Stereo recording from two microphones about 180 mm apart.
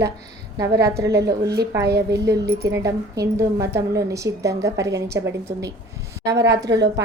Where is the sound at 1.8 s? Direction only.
70° right (ahead or behind).